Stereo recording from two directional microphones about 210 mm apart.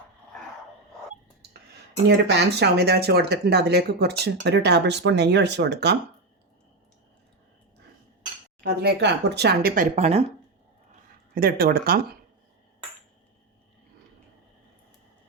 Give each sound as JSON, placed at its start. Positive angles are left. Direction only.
{"t": 2.0, "sound": "speech", "side_deg": -55}
{"t": 8.6, "sound": "speech", "side_deg": -50}
{"t": 9.9, "sound": "speech", "side_deg": -30}
{"t": 11.3, "sound": "speech", "side_deg": -45}